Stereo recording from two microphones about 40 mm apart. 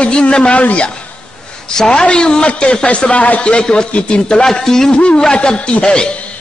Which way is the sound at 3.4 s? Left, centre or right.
Left.